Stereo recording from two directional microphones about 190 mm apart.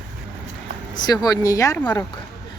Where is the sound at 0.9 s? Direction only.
20° left (ahead or behind).